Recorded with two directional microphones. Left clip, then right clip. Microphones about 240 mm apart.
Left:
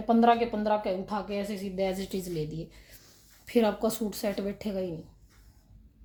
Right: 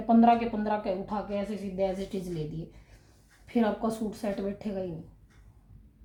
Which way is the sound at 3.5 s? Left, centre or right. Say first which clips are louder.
Left 3 dB; left.